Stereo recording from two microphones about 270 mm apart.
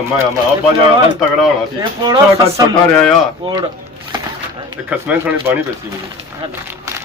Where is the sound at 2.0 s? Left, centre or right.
Centre.